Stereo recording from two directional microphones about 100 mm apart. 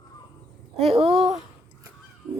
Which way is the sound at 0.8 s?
80° right.